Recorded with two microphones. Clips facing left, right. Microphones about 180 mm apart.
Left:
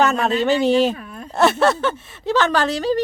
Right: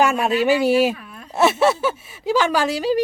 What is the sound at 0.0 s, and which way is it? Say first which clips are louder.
Speech: even; 10° right (ahead or behind).